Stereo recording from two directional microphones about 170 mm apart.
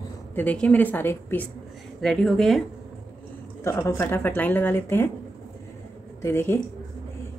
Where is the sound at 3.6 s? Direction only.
15° left (ahead or behind).